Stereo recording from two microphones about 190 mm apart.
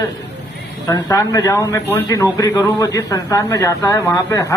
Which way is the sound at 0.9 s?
15° left (ahead or behind).